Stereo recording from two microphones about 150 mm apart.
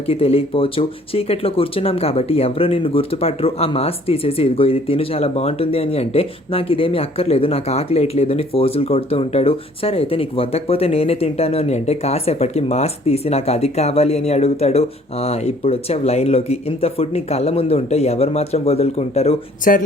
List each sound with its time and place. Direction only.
0.0 s speech: 40° left (ahead or behind)
19.7 s speech: 70° left (ahead or behind)